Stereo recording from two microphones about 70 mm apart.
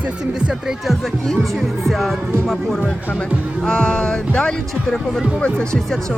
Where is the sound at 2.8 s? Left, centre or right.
Centre.